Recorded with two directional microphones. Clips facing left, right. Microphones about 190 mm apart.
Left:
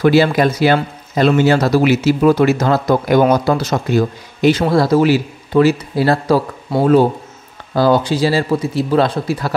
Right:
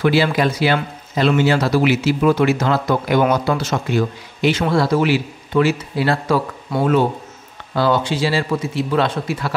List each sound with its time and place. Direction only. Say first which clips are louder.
0.0 s speech: left 4 dB; 45° left (ahead or behind)